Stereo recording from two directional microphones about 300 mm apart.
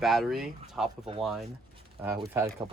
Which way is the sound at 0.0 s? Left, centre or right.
Centre.